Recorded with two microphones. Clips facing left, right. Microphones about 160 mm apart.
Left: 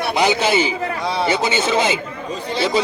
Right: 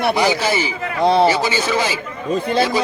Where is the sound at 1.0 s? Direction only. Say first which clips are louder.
Right 10 dB; 60° right (ahead or behind).